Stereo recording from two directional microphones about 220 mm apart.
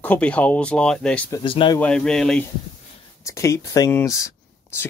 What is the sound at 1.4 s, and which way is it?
Speech, 20° left (ahead or behind).